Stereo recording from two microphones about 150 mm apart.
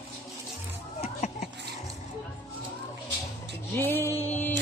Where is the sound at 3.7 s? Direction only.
15° left (ahead or behind).